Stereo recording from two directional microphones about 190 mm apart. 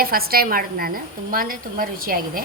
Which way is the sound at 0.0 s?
50° right (ahead or behind).